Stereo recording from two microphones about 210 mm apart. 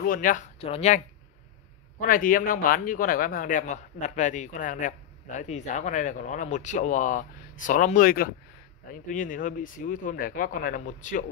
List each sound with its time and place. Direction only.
0.0 s speech: 40° left (ahead or behind)
0.6 s speech: 30° left (ahead or behind)